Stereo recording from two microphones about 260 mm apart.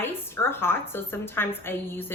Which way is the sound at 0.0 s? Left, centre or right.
Centre.